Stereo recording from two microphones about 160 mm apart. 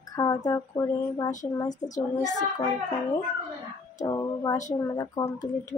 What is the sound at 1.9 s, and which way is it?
Child singing, 50° left (ahead or behind).